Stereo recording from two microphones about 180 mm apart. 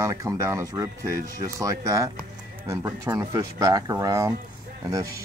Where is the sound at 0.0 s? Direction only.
20° right (ahead or behind).